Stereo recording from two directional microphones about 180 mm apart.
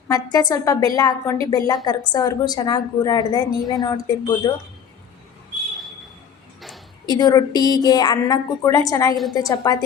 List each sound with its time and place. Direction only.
0.1 s a woman's voice: 20° left (ahead or behind)
7.0 s a woman's voice: 20° left (ahead or behind)